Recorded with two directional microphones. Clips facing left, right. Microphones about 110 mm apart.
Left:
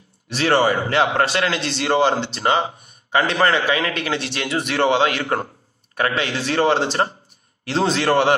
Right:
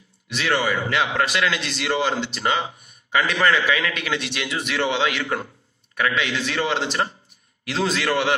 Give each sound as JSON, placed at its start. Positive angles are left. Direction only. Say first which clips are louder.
{"t": 0.3, "sound": "a man's voice", "louder": "left 5 dB", "side_deg": 35}